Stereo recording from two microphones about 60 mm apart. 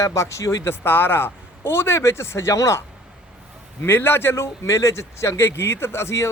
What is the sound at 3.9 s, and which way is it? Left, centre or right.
Speech, left.